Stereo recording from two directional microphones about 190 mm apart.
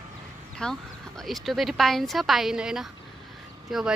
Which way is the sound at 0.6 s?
5° left (ahead or behind).